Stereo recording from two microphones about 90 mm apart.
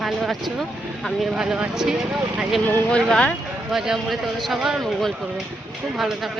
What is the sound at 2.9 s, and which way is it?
Speech, 10° left (ahead or behind).